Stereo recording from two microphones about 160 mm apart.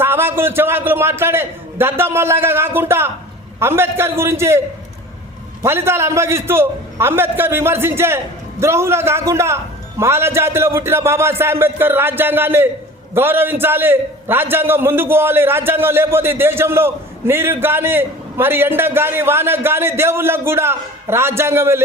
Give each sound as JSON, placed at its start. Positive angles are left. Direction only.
{"t": 0.0, "sound": "a man's voice", "side_deg": -15}
{"t": 5.6, "sound": "a man's voice", "side_deg": -15}